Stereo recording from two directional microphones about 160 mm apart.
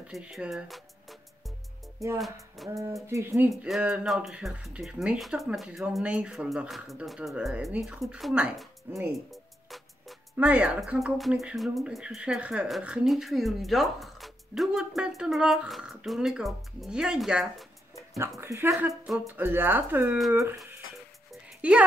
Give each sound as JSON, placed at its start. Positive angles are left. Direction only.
{"t": 0.0, "sound": "speech", "side_deg": -5}
{"t": 2.7, "sound": "speech", "side_deg": -20}
{"t": 3.4, "sound": "speech", "side_deg": 0}
{"t": 9.3, "sound": "music", "side_deg": 0}
{"t": 10.3, "sound": "speech", "side_deg": -10}
{"t": 18.4, "sound": "speech", "side_deg": -15}
{"t": 21.3, "sound": "music", "side_deg": -10}